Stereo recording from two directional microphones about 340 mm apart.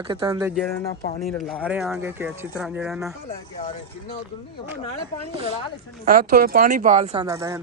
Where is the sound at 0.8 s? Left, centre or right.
Centre.